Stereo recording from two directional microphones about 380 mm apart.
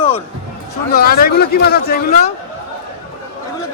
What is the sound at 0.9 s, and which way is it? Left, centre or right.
Speech, left.